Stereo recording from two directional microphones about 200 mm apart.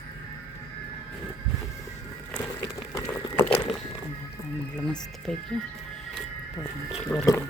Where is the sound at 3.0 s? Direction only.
15° left (ahead or behind).